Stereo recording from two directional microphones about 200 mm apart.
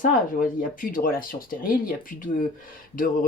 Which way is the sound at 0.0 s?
45° left (ahead or behind).